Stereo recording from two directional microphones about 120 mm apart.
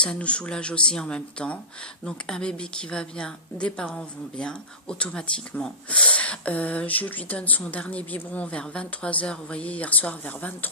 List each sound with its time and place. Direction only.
0.0 s a woman's voice: 10° left (ahead or behind)